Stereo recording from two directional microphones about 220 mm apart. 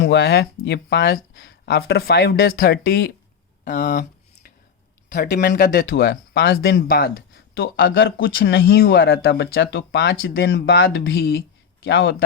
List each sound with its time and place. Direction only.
0.0 s speech: 50° left (ahead or behind)
3.6 s speech: 40° left (ahead or behind)
5.1 s speech: 40° left (ahead or behind)
8.3 s speech: 60° left (ahead or behind)
8.5 s speech: 45° left (ahead or behind); by 12.1 s 60° left (ahead or behind)